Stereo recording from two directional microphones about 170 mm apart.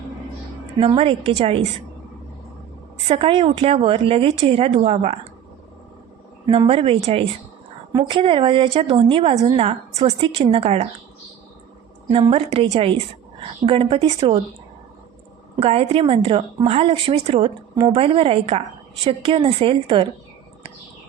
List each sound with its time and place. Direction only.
0.8 s a woman's voice: 35° right (ahead or behind)
3.1 s a woman's voice: 35° right (ahead or behind)
6.5 s a woman's voice: 35° right (ahead or behind)
12.1 s a woman's voice: 35° right (ahead or behind)
15.5 s a woman's voice: 35° right (ahead or behind)